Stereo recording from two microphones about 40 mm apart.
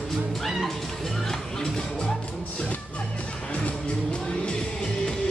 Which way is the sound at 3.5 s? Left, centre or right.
Left.